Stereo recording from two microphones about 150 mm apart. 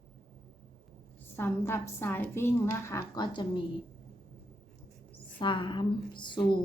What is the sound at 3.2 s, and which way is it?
Speech, 30° left (ahead or behind).